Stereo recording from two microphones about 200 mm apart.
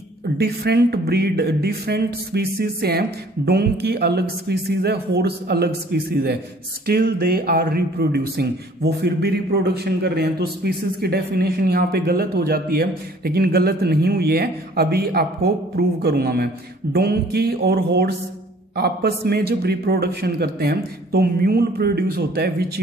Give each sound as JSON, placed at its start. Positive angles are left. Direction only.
{"t": 0.4, "sound": "a man's voice", "side_deg": -55}